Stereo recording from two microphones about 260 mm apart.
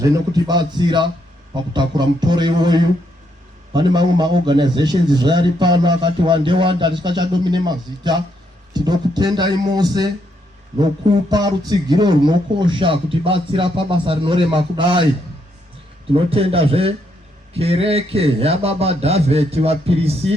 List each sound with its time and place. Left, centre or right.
0.0 s a man's voice: centre
16.1 s a man's voice: right